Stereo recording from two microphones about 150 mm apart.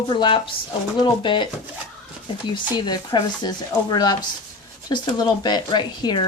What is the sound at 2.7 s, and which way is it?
Speech, 30° left (ahead or behind).